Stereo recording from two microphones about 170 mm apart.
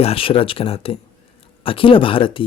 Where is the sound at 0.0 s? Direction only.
35° left (ahead or behind).